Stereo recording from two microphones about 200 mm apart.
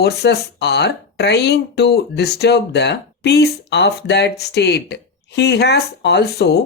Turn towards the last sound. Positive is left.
turn(degrees=55)  # may be behind; listen again after turning